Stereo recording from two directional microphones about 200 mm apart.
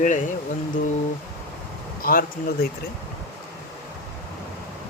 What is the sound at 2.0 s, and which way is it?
Speech, 45° left (ahead or behind).